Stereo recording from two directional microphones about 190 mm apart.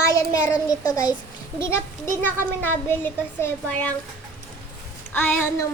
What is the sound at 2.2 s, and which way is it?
Speech, 10° left (ahead or behind).